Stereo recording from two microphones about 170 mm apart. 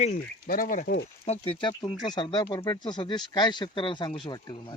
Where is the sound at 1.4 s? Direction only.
30° left (ahead or behind).